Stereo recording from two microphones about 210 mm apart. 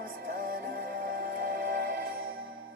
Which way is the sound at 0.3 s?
45° right (ahead or behind).